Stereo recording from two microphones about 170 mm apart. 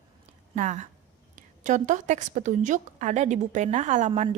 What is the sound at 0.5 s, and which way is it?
Speech, 45° right (ahead or behind).